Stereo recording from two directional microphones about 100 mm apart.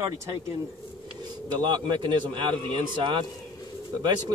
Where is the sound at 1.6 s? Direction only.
50° right (ahead or behind).